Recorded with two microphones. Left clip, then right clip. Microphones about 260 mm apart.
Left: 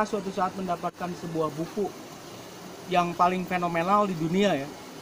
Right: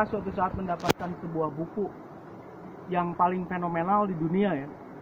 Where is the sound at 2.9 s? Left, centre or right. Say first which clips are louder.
Left 3 dB; centre.